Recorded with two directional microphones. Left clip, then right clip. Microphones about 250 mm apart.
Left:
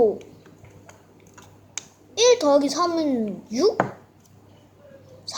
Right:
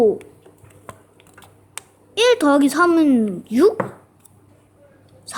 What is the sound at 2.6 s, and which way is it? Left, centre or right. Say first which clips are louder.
Speech: right 6 dB; right.